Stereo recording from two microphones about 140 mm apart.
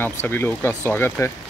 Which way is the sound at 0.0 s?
15° left (ahead or behind).